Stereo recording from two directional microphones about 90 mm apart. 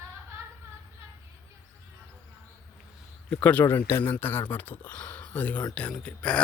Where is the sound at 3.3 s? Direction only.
15° left (ahead or behind).